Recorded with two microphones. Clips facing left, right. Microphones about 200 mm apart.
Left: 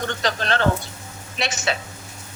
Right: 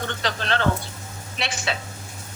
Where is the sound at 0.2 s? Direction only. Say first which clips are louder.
Left 2 dB; 45° left (ahead or behind).